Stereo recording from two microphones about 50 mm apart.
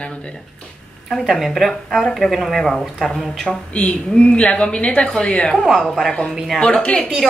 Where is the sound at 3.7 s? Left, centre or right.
Left.